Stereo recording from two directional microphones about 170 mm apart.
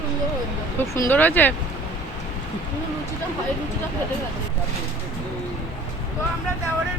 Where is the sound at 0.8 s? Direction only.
15° left (ahead or behind).